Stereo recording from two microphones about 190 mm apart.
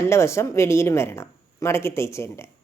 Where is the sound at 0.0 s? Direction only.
15° left (ahead or behind).